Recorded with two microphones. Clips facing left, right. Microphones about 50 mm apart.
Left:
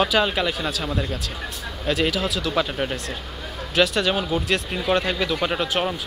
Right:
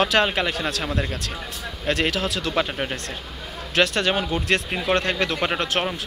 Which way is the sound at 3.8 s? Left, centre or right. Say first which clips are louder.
Left 1 dB; right.